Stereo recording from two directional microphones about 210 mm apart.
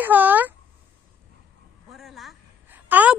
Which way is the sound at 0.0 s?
10° right (ahead or behind).